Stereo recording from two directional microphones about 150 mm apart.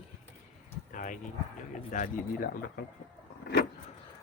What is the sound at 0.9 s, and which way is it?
Speech, 60° left (ahead or behind).